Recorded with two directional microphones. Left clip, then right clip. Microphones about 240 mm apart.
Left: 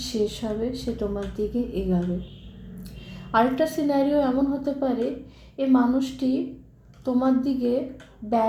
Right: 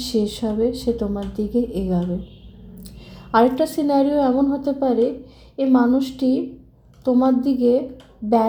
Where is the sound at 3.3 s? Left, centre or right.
Right.